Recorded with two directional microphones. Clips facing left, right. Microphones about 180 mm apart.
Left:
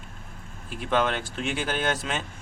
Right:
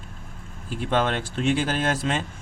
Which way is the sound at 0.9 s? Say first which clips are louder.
Right 1 dB; 35° right (ahead or behind).